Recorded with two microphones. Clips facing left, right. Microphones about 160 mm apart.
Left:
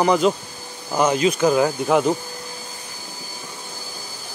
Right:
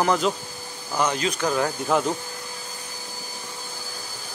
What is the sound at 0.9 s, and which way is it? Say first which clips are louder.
Speech: left 5 dB; 25° left (ahead or behind).